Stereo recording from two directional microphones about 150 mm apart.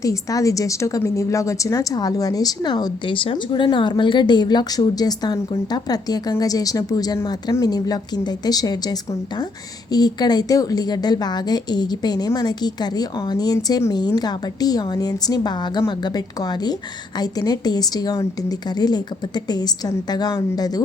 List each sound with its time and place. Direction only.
0.0 s a woman's voice: 20° left (ahead or behind)